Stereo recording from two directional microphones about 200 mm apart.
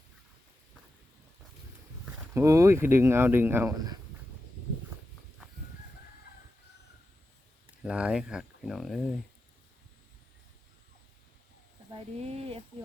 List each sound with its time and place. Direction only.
2.3 s speech: 15° right (ahead or behind)
7.9 s speech: 5° right (ahead or behind)
12.1 s speech: 30° right (ahead or behind)